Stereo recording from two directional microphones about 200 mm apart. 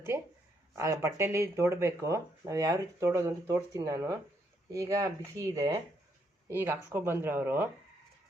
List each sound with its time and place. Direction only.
0.8 s speech: 15° right (ahead or behind)